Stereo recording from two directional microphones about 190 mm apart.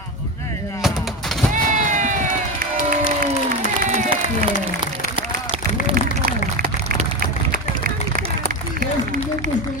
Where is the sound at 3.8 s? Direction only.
45° right (ahead or behind).